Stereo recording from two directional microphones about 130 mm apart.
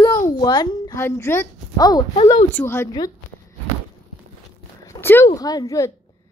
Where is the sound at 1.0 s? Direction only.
20° left (ahead or behind).